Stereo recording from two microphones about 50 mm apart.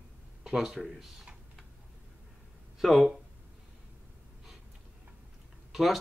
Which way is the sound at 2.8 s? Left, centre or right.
Centre.